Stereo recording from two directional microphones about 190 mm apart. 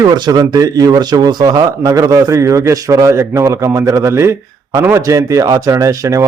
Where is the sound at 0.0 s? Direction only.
20° right (ahead or behind).